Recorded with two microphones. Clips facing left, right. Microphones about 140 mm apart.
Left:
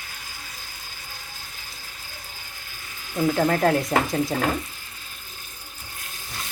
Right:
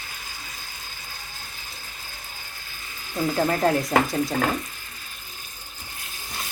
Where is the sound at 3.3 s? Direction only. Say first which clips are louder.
Even; 10° right (ahead or behind).